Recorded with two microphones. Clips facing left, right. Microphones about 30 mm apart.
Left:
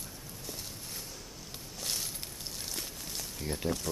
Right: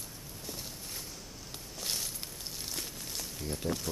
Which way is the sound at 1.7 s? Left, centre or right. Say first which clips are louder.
Even; centre.